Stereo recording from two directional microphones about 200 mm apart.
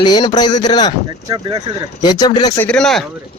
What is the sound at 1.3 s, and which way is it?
Speech, 20° right (ahead or behind).